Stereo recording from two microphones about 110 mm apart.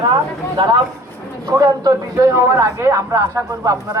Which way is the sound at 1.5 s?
35° right (ahead or behind).